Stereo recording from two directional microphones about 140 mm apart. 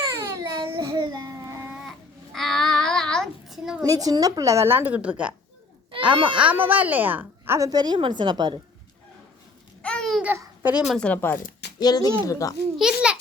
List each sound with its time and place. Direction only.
0.3 s a sound: 20° right (ahead or behind)
0.9 s babbling: 30° right (ahead or behind)
1.7 s babbling: centre (ahead or behind)
3.8 s a woman's voice: 25° right (ahead or behind); by 5.3 s 10° right (ahead or behind)
6.1 s a woman's voice: 35° right (ahead or behind)
6.4 s a woman's voice: 10° right (ahead or behind); by 8.5 s 30° right (ahead or behind)
9.8 s babbling: 5° left (ahead or behind)
10.2 s a child's voice: 15° right (ahead or behind)
10.9 s speech: 10° left (ahead or behind)
11.8 s speech: 30° left (ahead or behind)
12.8 s a child's voice: 5° right (ahead or behind)